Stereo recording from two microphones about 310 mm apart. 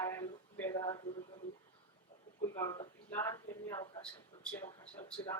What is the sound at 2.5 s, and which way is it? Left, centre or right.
A woman's voice, centre.